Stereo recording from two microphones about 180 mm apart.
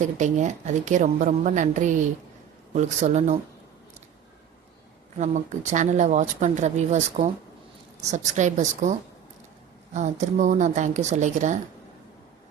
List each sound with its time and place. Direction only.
0.0 s a woman's voice: 45° right (ahead or behind)
5.1 s a woman's voice: 40° right (ahead or behind)